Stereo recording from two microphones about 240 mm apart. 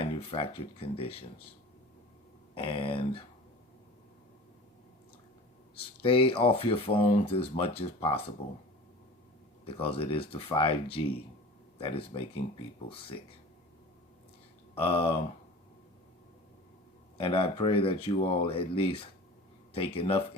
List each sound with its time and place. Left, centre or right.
0.0 s speech: left
2.6 s speech: left
6.0 s speech: left
9.6 s speech: left
11.8 s speech: left
14.8 s speech: left
17.2 s speech: left